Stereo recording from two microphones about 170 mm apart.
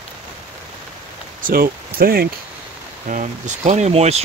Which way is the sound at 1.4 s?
55° right (ahead or behind).